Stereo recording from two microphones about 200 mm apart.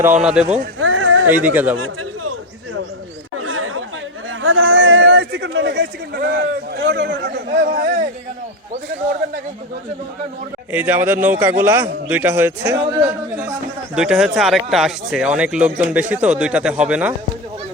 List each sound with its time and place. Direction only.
0.2 s speech: 5° right (ahead or behind)
0.8 s a sound: 80° right
1.3 s a man's voice: 10° right (ahead or behind)
3.3 s chatter: 90° right
4.4 s a man's voice: 75° right (ahead or behind); by 7.3 s 60° right (ahead or behind)
7.5 s a man's voice: 40° right (ahead or behind)
10.7 s a man's voice: 10° right (ahead or behind)
12.7 s a man's voice: 20° right (ahead or behind)
13.9 s speech: 5° right (ahead or behind)